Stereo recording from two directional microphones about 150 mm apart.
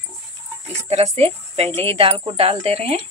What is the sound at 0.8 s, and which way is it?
A woman's voice, 45° right (ahead or behind).